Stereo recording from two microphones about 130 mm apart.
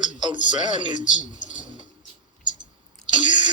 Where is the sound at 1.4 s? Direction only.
75° left (ahead or behind).